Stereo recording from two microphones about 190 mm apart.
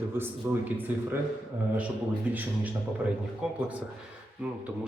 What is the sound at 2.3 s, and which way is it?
Speech, 10° right (ahead or behind).